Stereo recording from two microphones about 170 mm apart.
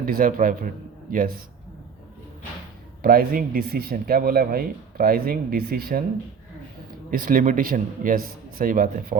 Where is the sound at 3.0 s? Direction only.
60° right (ahead or behind).